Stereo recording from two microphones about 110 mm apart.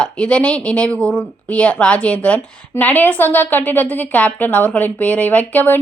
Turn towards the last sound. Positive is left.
turn(degrees=15)  # may be behind; listen again after turning